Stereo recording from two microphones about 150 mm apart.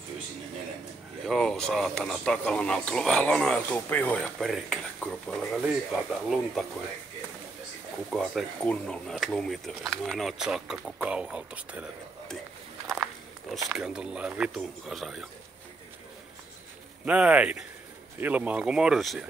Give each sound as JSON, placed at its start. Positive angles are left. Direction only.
{"t": 1.2, "sound": "speech", "side_deg": 0}
{"t": 8.1, "sound": "speech", "side_deg": 0}
{"t": 12.9, "sound": "walk", "side_deg": 0}
{"t": 13.7, "sound": "speech", "side_deg": -5}
{"t": 17.0, "sound": "speech", "side_deg": -10}